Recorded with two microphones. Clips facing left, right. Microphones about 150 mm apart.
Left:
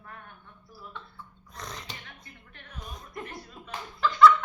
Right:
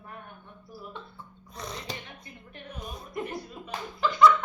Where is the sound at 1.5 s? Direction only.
Centre (ahead or behind).